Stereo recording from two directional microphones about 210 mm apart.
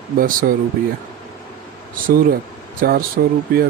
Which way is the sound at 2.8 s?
45° right (ahead or behind).